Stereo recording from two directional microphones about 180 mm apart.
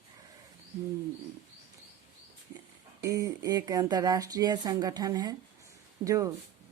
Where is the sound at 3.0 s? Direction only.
20° right (ahead or behind).